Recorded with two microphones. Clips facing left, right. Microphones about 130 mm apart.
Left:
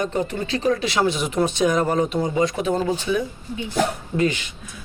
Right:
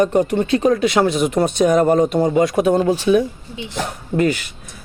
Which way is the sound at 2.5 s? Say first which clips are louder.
Right 7 dB; 75° right (ahead or behind).